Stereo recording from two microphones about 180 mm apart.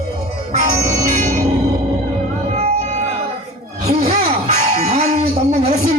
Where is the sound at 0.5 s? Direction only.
40° right (ahead or behind).